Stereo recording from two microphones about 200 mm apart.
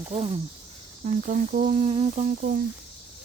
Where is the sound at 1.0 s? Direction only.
40° right (ahead or behind).